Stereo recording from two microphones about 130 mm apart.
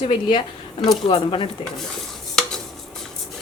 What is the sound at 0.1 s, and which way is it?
A woman's voice, 40° left (ahead or behind).